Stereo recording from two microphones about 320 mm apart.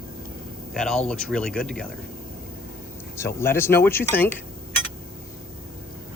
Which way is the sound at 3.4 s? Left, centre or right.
Centre.